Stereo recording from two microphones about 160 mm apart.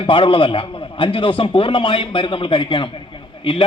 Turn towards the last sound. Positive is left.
turn(degrees=30)  # may be behind; listen again after turning